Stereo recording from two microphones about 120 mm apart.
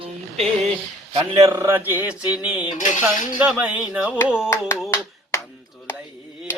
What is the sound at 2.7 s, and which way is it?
Dishes, 90° left.